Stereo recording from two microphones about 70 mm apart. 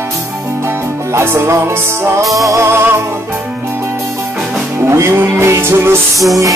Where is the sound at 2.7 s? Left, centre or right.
Right.